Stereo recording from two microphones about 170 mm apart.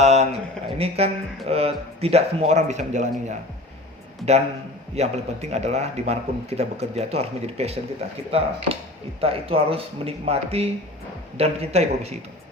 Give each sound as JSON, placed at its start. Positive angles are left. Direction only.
{"t": 0.0, "sound": "a sound", "side_deg": -40}
{"t": 0.8, "sound": "a man's voice", "side_deg": -35}
{"t": 4.9, "sound": "a man's voice", "side_deg": -40}